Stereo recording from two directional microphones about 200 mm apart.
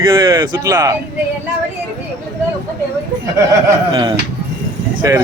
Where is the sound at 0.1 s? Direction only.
20° right (ahead or behind).